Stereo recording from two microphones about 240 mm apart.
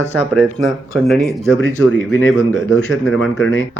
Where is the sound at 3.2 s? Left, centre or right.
Left.